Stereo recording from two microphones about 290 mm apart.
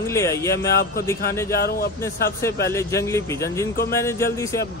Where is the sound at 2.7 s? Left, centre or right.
Centre.